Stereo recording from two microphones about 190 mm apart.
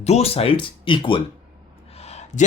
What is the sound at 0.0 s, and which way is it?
Speech, 35° left (ahead or behind).